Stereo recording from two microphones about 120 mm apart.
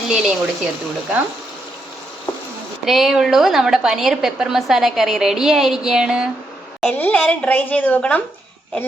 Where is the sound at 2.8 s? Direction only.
Centre (ahead or behind).